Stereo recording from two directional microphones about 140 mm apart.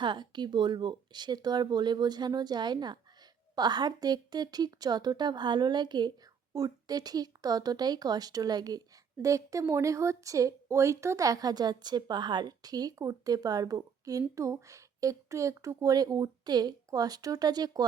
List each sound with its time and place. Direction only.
0.0 s speech: 35° right (ahead or behind)